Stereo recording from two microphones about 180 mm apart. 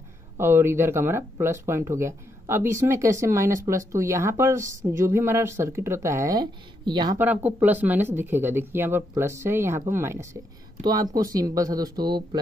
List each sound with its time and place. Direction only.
0.4 s speech: 15° right (ahead or behind)
7.2 s speech: 10° right (ahead or behind)